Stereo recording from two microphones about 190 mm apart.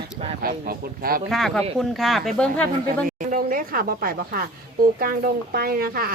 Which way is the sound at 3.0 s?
45° right (ahead or behind).